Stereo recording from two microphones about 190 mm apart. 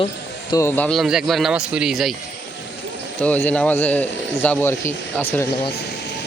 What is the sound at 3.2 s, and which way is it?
A man's voice, 5° left (ahead or behind).